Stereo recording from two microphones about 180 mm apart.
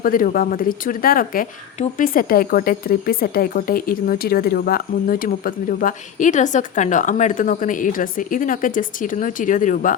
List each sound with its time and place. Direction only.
0.0 s speech: 50° left (ahead or behind)